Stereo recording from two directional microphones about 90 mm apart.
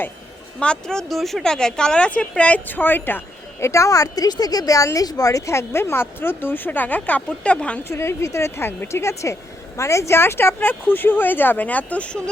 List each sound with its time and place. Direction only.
0.6 s speech: 10° left (ahead or behind)
3.6 s a woman's voice: 35° left (ahead or behind); by 7.8 s 15° left (ahead or behind)
7.9 s speech: 30° left (ahead or behind); by 12.3 s 10° left (ahead or behind)